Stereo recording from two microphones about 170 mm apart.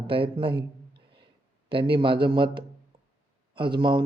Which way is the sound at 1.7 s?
30° right (ahead or behind).